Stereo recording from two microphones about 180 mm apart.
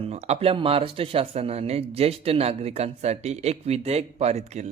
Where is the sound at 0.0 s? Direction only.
35° right (ahead or behind).